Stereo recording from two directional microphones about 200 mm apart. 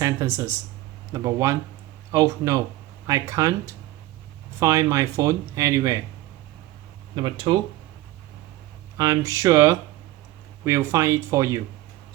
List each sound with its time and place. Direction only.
0.0 s speech: 15° right (ahead or behind)
7.2 s speech: 25° right (ahead or behind)
9.0 s speech: 15° right (ahead or behind)